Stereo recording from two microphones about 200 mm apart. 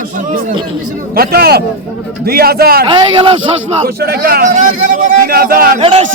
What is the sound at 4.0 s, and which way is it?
A man's voice, 50° right (ahead or behind).